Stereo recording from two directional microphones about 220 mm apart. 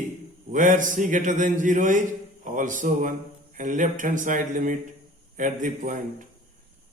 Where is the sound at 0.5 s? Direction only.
35° right (ahead or behind).